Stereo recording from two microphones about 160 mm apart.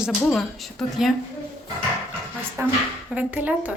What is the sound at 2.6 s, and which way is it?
Speech, 15° right (ahead or behind).